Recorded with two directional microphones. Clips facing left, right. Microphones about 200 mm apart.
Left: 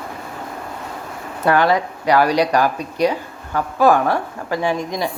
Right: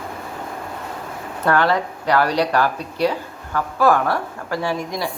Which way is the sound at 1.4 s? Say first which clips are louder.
Left 2 dB; 15° left (ahead or behind).